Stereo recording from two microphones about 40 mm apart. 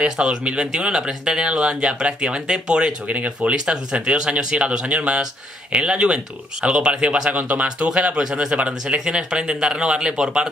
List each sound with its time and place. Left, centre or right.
0.0 s speech: right
3.1 s speech: right
7.6 s speech: right